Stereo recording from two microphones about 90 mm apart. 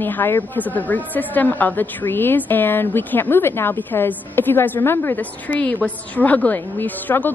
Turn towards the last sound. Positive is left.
turn(degrees=20)  # may be behind; listen again after turning